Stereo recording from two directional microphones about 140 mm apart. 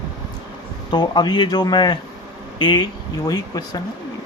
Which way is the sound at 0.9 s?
30° left (ahead or behind).